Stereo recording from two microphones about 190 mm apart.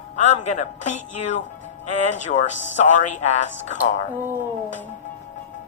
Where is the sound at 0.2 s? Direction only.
40° left (ahead or behind).